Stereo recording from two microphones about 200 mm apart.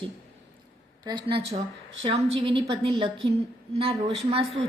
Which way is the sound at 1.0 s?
25° right (ahead or behind).